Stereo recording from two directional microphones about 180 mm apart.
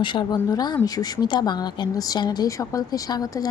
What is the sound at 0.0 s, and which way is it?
Speech, 25° left (ahead or behind).